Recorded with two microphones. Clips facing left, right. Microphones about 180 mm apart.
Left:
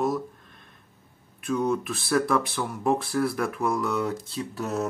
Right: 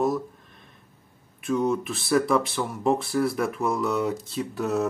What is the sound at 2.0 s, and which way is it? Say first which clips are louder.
Speech: right 3 dB; centre (ahead or behind).